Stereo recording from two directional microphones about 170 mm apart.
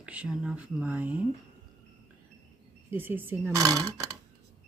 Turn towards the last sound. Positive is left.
turn(degrees=-20)  # may be behind; listen again after turning